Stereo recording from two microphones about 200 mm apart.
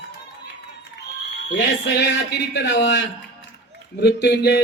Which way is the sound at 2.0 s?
60° left (ahead or behind).